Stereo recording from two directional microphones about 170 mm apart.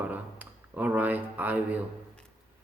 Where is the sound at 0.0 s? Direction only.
10° right (ahead or behind).